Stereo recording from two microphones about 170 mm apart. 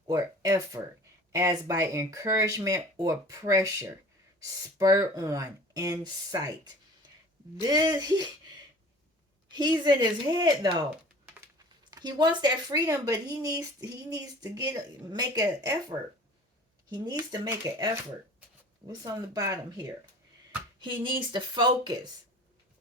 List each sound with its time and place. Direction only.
0.1 s speech: 20° right (ahead or behind)
7.6 s speech: 25° right (ahead or behind)
11.9 s speech: 25° right (ahead or behind)